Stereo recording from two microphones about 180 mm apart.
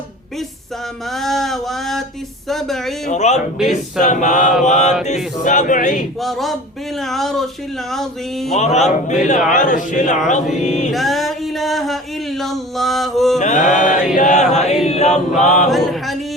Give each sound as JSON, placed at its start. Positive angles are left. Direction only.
{"t": 1.1, "sound": "a man's voice", "side_deg": 0}
{"t": 3.1, "sound": "speech", "side_deg": 40}
{"t": 6.1, "sound": "a man's voice", "side_deg": 0}
{"t": 8.4, "sound": "speech", "side_deg": 40}
{"t": 10.9, "sound": "a sound", "side_deg": 0}
{"t": 13.4, "sound": "speech", "side_deg": 45}
{"t": 14.8, "sound": "choir", "side_deg": 35}
{"t": 15.7, "sound": "a capella", "side_deg": 0}